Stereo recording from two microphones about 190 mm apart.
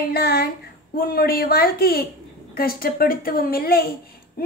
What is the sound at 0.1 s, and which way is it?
Speech, 55° left (ahead or behind).